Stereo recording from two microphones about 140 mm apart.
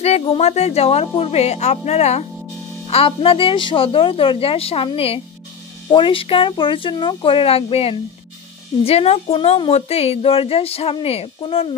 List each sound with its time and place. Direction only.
0.2 s a woman's voice: 45° left (ahead or behind)